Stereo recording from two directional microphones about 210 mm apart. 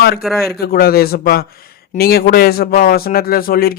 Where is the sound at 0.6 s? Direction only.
45° left (ahead or behind).